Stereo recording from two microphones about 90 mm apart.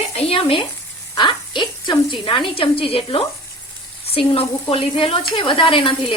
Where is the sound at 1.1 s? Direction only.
55° left (ahead or behind).